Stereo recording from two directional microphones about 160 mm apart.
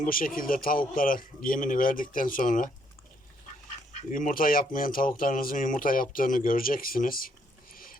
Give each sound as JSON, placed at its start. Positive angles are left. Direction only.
{"t": 0.0, "sound": "speech", "side_deg": 60}
{"t": 4.1, "sound": "speech", "side_deg": 60}